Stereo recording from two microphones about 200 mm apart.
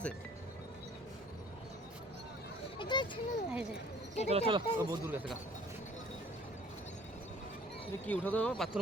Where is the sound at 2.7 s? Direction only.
25° left (ahead or behind).